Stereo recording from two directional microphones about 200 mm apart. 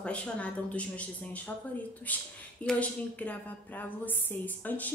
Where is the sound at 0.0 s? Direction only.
5° left (ahead or behind).